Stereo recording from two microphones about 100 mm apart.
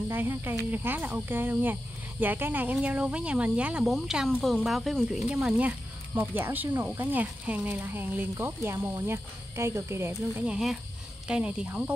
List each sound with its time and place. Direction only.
0.1 s speech: 20° right (ahead or behind); by 5.2 s centre (ahead or behind)
5.3 s speech: 15° right (ahead or behind)
10.4 s speech: 10° right (ahead or behind)